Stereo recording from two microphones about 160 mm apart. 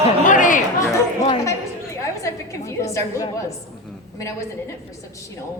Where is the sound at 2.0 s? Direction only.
20° left (ahead or behind).